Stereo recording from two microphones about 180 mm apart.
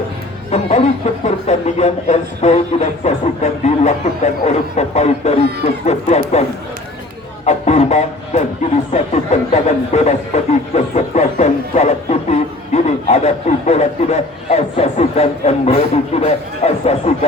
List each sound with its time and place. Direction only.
0.5 s speech: 40° left (ahead or behind)
7.4 s speech: 40° left (ahead or behind)